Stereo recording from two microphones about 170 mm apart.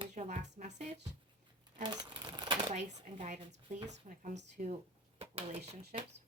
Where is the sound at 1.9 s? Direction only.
25° right (ahead or behind).